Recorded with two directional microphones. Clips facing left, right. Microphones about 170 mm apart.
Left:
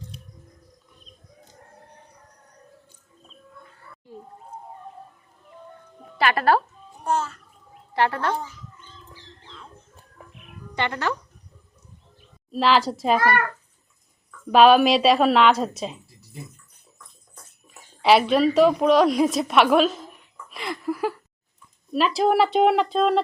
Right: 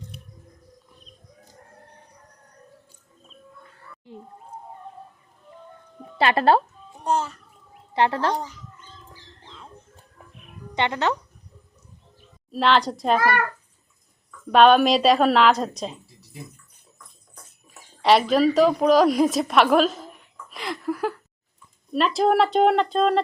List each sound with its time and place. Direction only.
6.1 s a child's voice: 25° right (ahead or behind)
10.8 s speech: 20° right (ahead or behind)
12.5 s speech: centre (ahead or behind)
14.3 s a woman's voice: 5° left (ahead or behind)
18.0 s a woman's voice: centre (ahead or behind)